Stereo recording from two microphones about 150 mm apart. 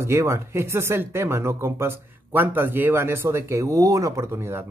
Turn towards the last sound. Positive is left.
turn(degrees=-15)  # may be behind; listen again after turning